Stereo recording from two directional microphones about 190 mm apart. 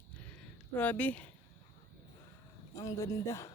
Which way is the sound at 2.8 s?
15° left (ahead or behind).